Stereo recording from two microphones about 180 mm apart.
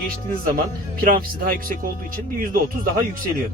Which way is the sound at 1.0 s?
50° right (ahead or behind).